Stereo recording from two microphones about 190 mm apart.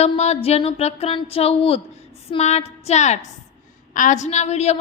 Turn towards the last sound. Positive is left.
turn(degrees=35)  # may be behind; listen again after turning